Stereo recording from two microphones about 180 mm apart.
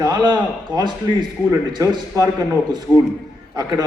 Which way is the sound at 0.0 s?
25° right (ahead or behind).